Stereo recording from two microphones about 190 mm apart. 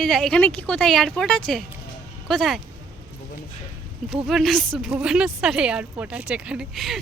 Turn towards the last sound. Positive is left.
turn(degrees=0)  # may be behind; listen again after turning